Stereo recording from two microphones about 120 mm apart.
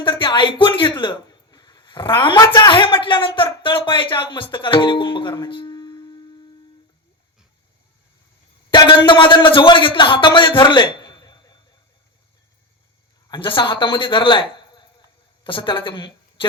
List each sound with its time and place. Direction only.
0.0 s a sound: 45° left (ahead or behind)
2.5 s speech: 40° left (ahead or behind)
8.7 s a man's voice: 40° left (ahead or behind)
13.3 s a man's voice: 45° left (ahead or behind)